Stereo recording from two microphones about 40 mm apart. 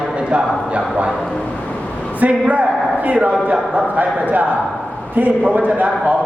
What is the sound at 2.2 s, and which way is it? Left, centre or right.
A man's voice, right.